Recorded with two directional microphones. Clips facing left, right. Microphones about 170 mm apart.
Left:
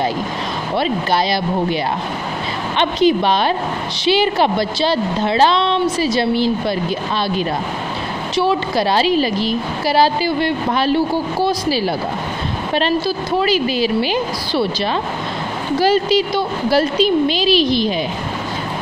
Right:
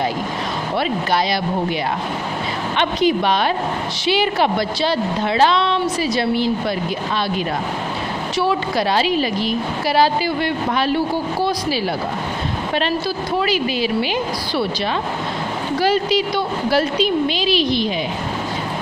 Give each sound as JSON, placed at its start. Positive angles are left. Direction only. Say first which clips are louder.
{"t": 0.7, "sound": "a woman's voice", "louder": "left 2 dB", "side_deg": 30}
{"t": 2.8, "sound": "a woman's voice", "louder": "left 3 dB", "side_deg": 30}
{"t": 8.4, "sound": "a woman's voice", "louder": "left 3 dB", "side_deg": 30}
{"t": 13.4, "sound": "a woman's voice", "louder": "left 3 dB", "side_deg": 35}
{"t": 15.8, "sound": "a woman's voice", "louder": "left 3 dB", "side_deg": 35}